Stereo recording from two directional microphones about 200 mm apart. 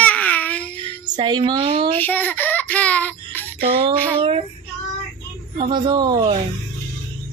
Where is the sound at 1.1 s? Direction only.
20° right (ahead or behind).